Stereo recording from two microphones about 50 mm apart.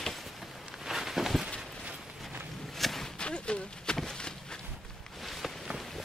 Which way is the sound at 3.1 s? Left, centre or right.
Centre.